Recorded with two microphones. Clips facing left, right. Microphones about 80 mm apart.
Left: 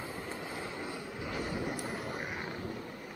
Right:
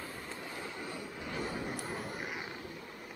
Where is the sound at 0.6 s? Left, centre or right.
Centre.